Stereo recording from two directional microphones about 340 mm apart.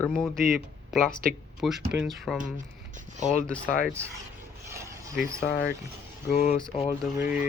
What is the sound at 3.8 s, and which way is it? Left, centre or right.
Speech, centre.